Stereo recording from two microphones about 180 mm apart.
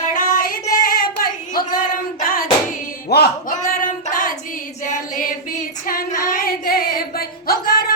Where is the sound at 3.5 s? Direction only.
50° left (ahead or behind).